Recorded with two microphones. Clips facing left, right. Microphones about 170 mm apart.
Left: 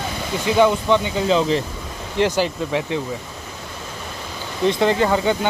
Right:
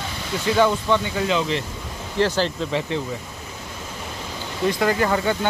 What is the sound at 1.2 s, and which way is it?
Speech, 35° left (ahead or behind).